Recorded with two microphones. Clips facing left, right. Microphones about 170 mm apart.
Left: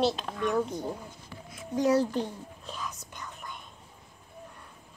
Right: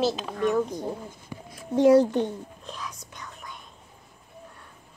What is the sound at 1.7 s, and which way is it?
Speech, 25° right (ahead or behind).